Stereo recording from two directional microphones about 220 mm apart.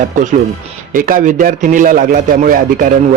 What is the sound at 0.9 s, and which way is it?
Speech, 40° right (ahead or behind).